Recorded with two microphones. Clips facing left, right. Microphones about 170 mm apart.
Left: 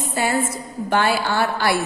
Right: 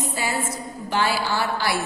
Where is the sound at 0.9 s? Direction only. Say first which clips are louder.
Left 3 dB; 55° left (ahead or behind).